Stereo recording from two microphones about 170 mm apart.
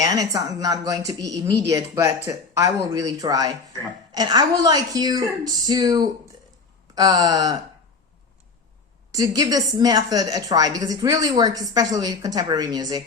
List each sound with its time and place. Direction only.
0.0 s a woman's voice: 20° right (ahead or behind)
9.1 s a woman's voice: 20° right (ahead or behind)